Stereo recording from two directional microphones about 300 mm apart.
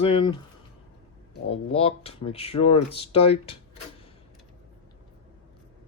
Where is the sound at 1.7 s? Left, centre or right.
Centre.